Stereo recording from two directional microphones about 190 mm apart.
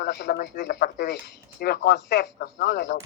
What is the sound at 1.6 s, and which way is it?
Speech, 55° left (ahead or behind).